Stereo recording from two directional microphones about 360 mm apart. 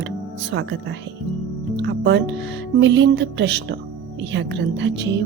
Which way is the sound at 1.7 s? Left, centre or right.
Right.